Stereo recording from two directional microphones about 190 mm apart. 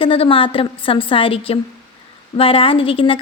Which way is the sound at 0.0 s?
30° left (ahead or behind).